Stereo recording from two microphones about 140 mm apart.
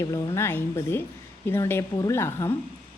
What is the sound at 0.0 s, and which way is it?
A woman's voice, 20° left (ahead or behind).